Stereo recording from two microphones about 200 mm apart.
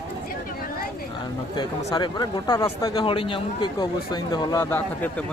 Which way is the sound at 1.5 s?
20° left (ahead or behind).